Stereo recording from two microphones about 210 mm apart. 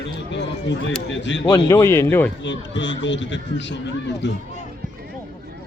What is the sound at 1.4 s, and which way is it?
Speech, 20° left (ahead or behind).